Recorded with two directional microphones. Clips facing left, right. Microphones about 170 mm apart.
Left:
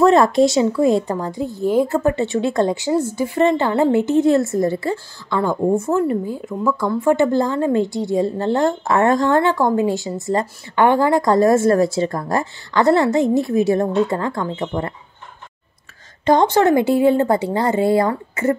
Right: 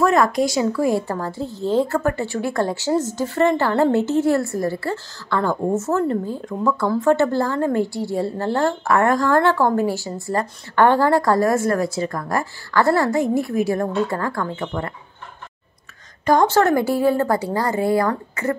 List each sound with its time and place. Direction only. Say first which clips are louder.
0.0 s a woman's voice: left 5 dB; 25° left (ahead or behind)
16.3 s a woman's voice: left 2 dB; 20° left (ahead or behind)